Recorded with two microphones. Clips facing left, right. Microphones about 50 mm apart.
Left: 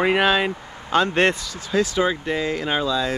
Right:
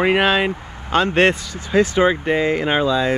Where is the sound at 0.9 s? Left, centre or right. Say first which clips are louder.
Right 3 dB; right.